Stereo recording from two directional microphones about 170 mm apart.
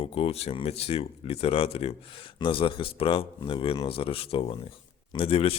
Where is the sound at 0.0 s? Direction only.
35° left (ahead or behind).